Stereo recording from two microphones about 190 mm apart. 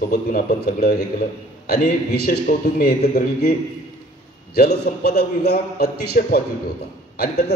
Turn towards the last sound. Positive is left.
turn(degrees=55)  # may be behind; listen again after turning